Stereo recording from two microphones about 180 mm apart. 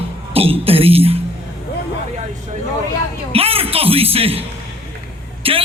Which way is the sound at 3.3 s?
30° right (ahead or behind).